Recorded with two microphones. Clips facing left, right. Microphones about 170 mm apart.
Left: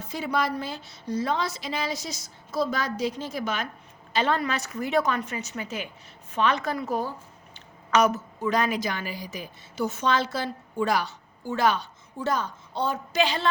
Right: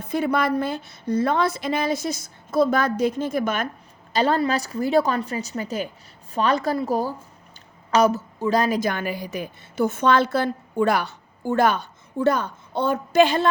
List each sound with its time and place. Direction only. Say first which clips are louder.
0.0 s a woman's voice: right 5 dB; 55° right (ahead or behind)
4.1 s a woman's voice: right 5 dB; 35° right (ahead or behind)
7.5 s a sound: right 2 dB; 30° right (ahead or behind)
8.8 s a woman's voice: right 6 dB; 55° right (ahead or behind)